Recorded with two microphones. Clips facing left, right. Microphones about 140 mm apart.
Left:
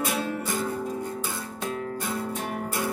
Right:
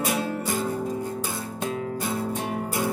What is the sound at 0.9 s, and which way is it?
Music, 10° right (ahead or behind).